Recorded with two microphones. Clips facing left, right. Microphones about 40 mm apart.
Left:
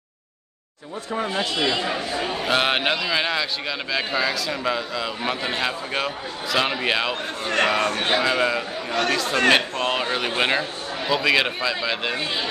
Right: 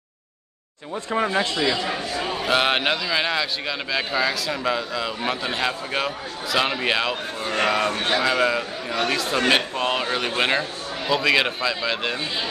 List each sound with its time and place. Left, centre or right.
1.1 s speech: right
2.2 s a man's voice: centre
7.9 s speech: left
8.2 s a man's voice: centre